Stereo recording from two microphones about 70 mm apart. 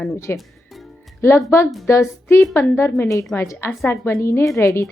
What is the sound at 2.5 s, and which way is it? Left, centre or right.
A woman's voice, left.